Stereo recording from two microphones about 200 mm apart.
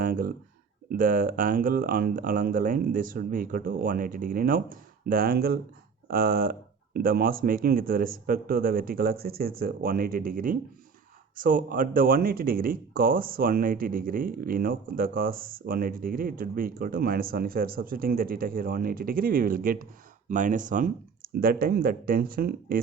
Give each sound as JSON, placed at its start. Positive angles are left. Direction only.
{"t": 0.0, "sound": "speech", "side_deg": -45}